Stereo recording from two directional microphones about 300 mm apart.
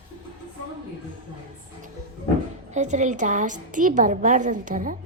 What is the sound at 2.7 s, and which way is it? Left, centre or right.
A woman's voice, right.